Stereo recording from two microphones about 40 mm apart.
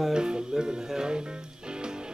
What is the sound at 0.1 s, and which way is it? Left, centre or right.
Music, centre.